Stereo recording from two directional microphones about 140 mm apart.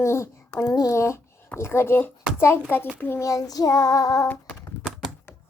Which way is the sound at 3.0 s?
15° left (ahead or behind).